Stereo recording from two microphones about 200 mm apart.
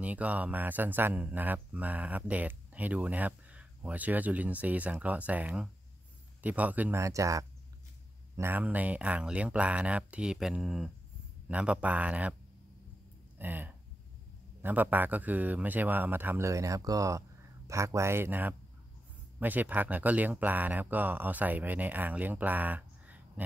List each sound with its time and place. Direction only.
0.0 s speech: 5° right (ahead or behind)
13.4 s speech: 10° right (ahead or behind)